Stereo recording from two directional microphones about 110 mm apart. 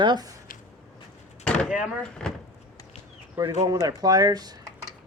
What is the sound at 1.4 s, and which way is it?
Door, 10° left (ahead or behind).